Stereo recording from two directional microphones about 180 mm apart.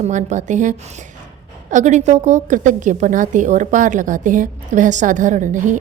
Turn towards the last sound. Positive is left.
turn(degrees=-45)  # may be behind; listen again after turning